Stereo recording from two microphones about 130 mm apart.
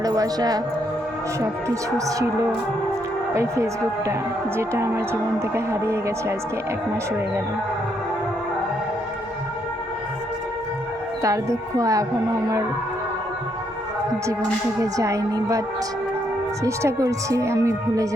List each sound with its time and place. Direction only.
0.0 s speech: 30° right (ahead or behind)
3.3 s speech: 20° right (ahead or behind)
11.2 s speech: 25° right (ahead or behind)
14.8 s speech: 25° right (ahead or behind)
16.6 s speech: 25° right (ahead or behind)